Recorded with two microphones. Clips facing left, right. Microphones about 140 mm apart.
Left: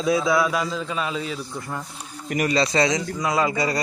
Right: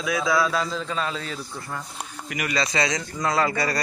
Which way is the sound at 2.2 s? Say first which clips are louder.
Left 6 dB; 35° left (ahead or behind).